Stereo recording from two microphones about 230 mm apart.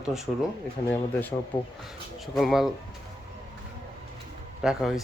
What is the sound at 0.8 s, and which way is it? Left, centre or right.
Speech, left.